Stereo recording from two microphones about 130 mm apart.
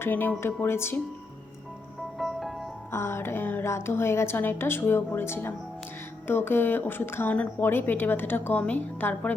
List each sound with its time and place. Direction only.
0.0 s speech: 15° left (ahead or behind)
2.1 s music: centre (ahead or behind)
2.9 s a woman's voice: 20° left (ahead or behind)